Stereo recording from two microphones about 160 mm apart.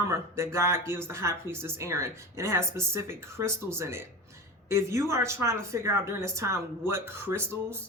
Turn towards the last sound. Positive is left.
turn(degrees=-15)  # may be behind; listen again after turning